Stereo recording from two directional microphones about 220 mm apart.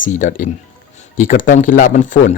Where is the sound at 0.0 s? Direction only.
35° left (ahead or behind).